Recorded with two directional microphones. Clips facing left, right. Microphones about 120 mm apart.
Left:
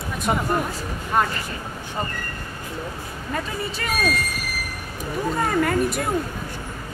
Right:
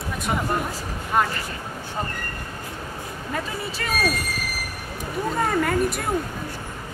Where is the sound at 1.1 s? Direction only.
Centre (ahead or behind).